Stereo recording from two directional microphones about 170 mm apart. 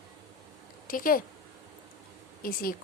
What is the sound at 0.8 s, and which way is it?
Speech, 55° left (ahead or behind).